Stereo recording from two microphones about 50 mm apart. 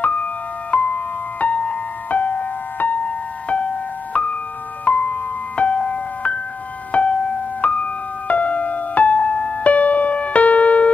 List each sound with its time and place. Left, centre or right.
0.0 s music: left